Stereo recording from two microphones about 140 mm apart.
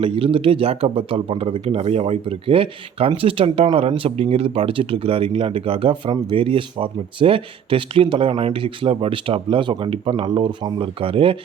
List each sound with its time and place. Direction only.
0.0 s speech: 40° right (ahead or behind)